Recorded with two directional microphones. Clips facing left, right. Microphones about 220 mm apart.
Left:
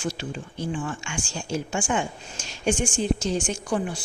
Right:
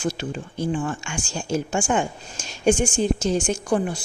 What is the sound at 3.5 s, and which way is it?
Speech, 45° right (ahead or behind).